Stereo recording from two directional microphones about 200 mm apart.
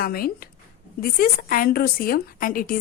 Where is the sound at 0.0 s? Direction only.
45° left (ahead or behind).